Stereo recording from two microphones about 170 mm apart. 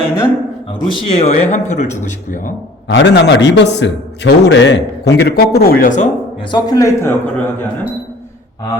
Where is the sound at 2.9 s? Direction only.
90° left; by 6.1 s 50° left (ahead or behind).